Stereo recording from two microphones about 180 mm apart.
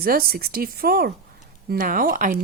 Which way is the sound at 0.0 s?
55° right (ahead or behind).